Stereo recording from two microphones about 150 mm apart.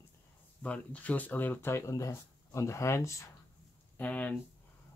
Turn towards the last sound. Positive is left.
turn(degrees=10)  # may be behind; listen again after turning